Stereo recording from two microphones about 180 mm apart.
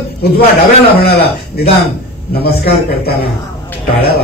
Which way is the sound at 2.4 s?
60° left (ahead or behind).